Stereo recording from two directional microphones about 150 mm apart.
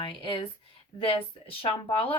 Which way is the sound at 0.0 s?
35° left (ahead or behind).